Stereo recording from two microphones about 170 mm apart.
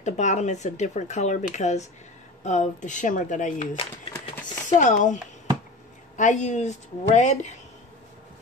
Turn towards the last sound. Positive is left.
turn(degrees=45)  # may be behind; listen again after turning